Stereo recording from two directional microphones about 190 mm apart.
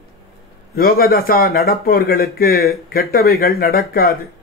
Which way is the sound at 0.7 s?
50° left (ahead or behind).